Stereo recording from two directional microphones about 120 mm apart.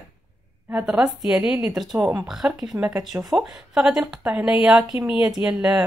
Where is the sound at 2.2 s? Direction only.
5° right (ahead or behind).